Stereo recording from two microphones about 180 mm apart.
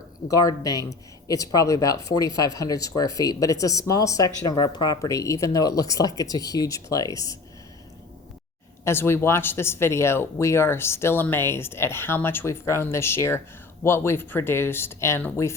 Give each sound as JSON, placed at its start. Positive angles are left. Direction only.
{"t": 0.3, "sound": "speech", "side_deg": 20}
{"t": 8.8, "sound": "speech", "side_deg": 15}